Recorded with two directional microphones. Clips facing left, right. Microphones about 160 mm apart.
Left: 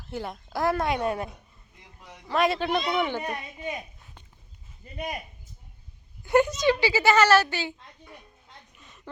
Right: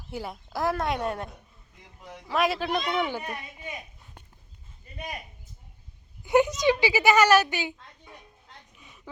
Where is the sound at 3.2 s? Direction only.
20° left (ahead or behind).